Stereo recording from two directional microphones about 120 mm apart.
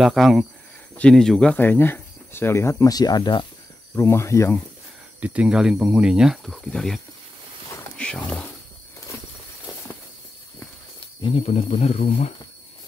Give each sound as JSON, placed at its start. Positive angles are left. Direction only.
{"t": 0.0, "sound": "speech", "side_deg": 0}
{"t": 3.9, "sound": "speech", "side_deg": 20}
{"t": 5.2, "sound": "speech", "side_deg": -10}
{"t": 8.0, "sound": "speech", "side_deg": 5}
{"t": 11.2, "sound": "speech", "side_deg": 55}